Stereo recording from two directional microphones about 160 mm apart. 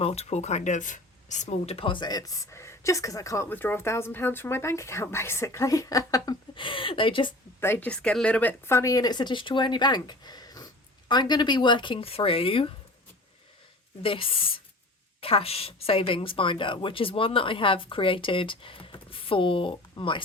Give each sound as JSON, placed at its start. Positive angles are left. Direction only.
{"t": 0.0, "sound": "speech", "side_deg": 40}
{"t": 7.6, "sound": "a woman's voice", "side_deg": 10}
{"t": 14.0, "sound": "a woman's voice", "side_deg": 35}